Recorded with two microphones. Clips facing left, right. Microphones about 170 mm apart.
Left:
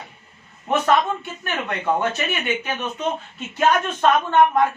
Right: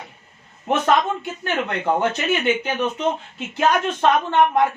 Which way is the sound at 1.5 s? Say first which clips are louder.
Right 2 dB; 20° right (ahead or behind).